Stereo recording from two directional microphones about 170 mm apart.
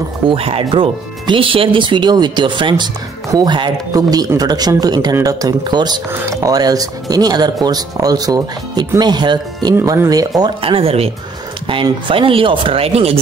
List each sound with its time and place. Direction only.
0.3 s speech: 35° right (ahead or behind)